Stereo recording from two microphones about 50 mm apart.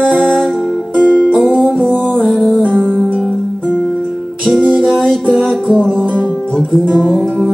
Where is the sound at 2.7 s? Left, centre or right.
Centre.